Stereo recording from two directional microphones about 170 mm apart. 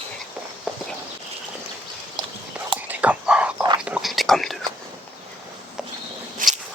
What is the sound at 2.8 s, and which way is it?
Dog, 10° right (ahead or behind).